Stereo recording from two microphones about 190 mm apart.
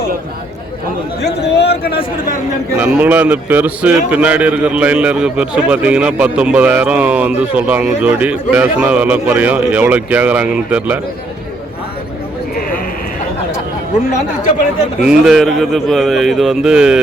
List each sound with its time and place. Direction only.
1.2 s a man's voice: 60° left (ahead or behind)
2.7 s a man's voice: 10° right (ahead or behind)
15.0 s a man's voice: centre (ahead or behind)